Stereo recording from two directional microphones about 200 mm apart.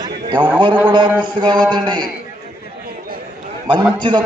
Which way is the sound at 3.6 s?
25° right (ahead or behind).